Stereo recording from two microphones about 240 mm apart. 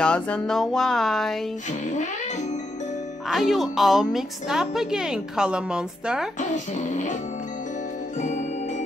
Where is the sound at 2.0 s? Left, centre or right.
Left.